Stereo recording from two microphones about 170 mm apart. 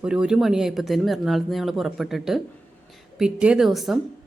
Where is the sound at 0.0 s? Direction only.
5° right (ahead or behind).